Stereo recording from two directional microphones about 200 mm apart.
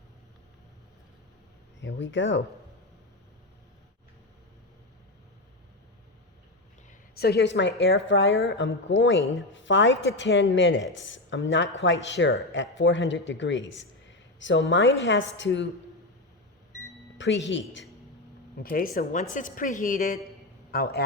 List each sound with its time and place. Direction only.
1.8 s speech: 65° left (ahead or behind)
7.2 s a woman's voice: 55° left (ahead or behind)
17.2 s speech: 65° left (ahead or behind)
18.6 s a woman's voice: 45° left (ahead or behind)